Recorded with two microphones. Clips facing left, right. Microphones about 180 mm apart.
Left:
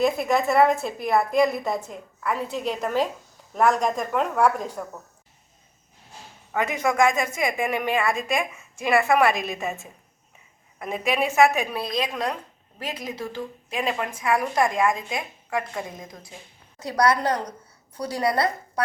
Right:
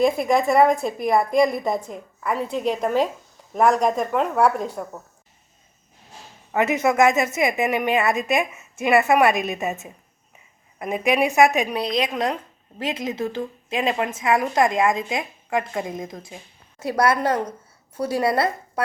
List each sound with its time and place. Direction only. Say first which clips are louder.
0.3 s a woman's voice: right 2 dB; 5° left (ahead or behind)
2.6 s a woman's voice: right 5 dB; 10° right (ahead or behind)
6.5 s a woman's voice: right 4 dB; 25° right (ahead or behind)